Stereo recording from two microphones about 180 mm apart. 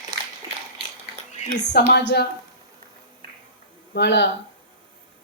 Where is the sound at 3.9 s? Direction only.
70° left (ahead or behind).